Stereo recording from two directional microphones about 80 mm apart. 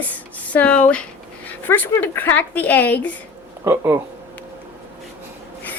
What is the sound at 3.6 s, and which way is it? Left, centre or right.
Speech, right.